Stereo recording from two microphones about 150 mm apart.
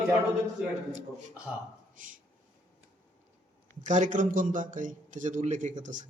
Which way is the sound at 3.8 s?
55° right (ahead or behind).